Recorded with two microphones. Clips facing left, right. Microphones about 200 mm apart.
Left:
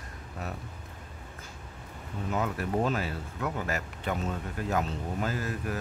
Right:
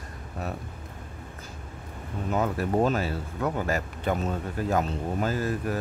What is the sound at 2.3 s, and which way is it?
Speech, 40° right (ahead or behind).